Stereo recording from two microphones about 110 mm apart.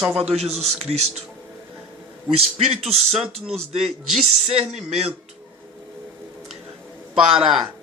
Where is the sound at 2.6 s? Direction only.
70° right (ahead or behind).